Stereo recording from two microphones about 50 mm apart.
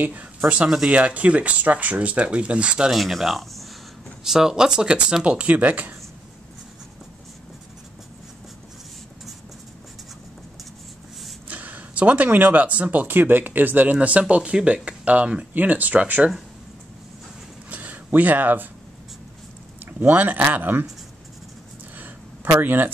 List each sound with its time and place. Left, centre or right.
0.0 s speech: right
0.7 s speech: centre
0.9 s speech: right
2.9 s speech: centre; by 5.9 s right
11.4 s speech: right
13.9 s speech: right
17.6 s a sound: right
19.8 s speech: right
21.9 s a sound: right